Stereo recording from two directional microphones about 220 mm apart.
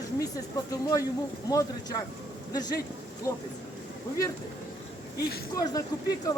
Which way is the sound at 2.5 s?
20° left (ahead or behind).